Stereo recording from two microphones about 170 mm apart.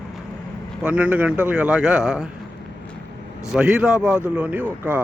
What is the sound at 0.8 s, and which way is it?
Speech, 10° right (ahead or behind).